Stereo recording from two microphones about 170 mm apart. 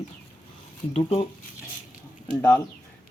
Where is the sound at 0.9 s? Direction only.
35° left (ahead or behind).